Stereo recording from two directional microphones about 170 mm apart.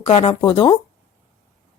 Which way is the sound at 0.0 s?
35° left (ahead or behind).